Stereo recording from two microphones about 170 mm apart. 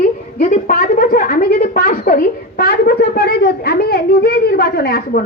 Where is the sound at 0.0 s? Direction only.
55° left (ahead or behind).